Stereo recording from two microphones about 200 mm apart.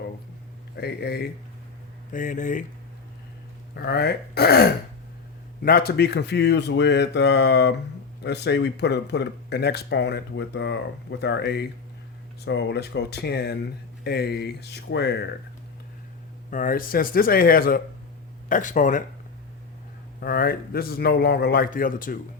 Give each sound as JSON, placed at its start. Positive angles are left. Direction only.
{"t": 0.8, "sound": "a man's voice", "side_deg": 50}
{"t": 2.1, "sound": "speech", "side_deg": 40}
{"t": 3.8, "sound": "a man's voice", "side_deg": 55}
{"t": 16.5, "sound": "a man's voice", "side_deg": 40}
{"t": 20.2, "sound": "a man's voice", "side_deg": 50}